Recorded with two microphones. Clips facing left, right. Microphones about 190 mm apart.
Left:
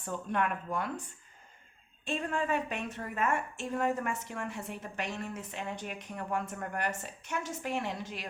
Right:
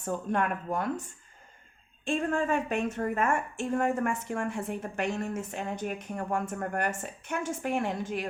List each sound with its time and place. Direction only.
0.0 s a woman's voice: 45° right (ahead or behind)
2.0 s a woman's voice: 45° right (ahead or behind)